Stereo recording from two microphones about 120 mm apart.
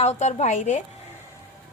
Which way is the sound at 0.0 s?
70° left (ahead or behind).